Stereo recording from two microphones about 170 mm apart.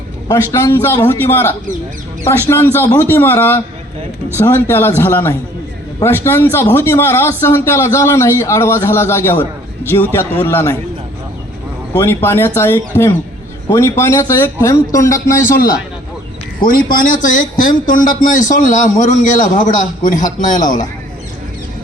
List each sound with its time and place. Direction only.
0.3 s speech: 20° left (ahead or behind)
11.9 s speech: 15° left (ahead or behind)
16.6 s speech: 55° left (ahead or behind)